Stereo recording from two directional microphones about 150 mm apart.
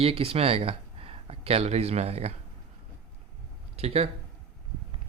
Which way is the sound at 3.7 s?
45° right (ahead or behind).